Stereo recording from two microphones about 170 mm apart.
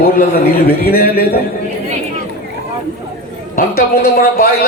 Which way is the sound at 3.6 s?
60° left (ahead or behind).